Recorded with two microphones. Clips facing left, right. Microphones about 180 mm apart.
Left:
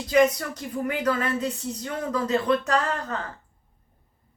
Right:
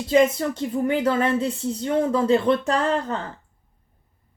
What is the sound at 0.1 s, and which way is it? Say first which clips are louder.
Speech: right 2 dB; 25° right (ahead or behind).